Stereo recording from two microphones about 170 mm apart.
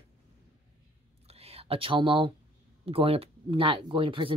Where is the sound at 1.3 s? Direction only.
35° right (ahead or behind).